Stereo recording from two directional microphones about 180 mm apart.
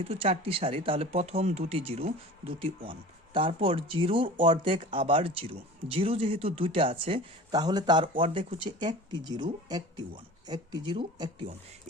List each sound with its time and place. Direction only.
0.0 s speech: 30° right (ahead or behind)